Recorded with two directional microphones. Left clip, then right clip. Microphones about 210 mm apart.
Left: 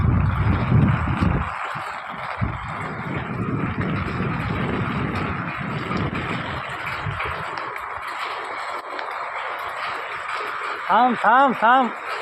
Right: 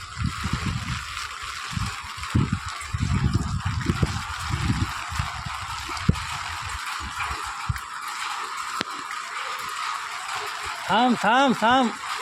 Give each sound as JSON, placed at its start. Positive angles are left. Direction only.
{"t": 10.9, "sound": "speech", "side_deg": -30}